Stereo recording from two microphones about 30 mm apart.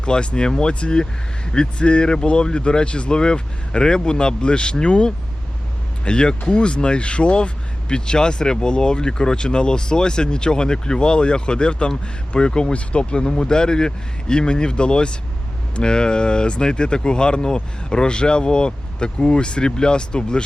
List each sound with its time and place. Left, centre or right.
0.0 s speech: left